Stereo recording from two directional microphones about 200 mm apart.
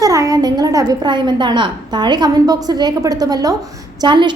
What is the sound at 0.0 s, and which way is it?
A woman's voice, 15° right (ahead or behind).